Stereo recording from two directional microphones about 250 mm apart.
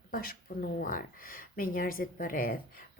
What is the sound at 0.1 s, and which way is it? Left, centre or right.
Speech, left.